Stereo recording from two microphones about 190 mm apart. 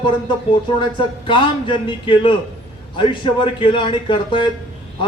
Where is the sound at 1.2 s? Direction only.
25° left (ahead or behind).